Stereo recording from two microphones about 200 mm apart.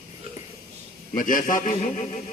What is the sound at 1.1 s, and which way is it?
Speech, 40° left (ahead or behind).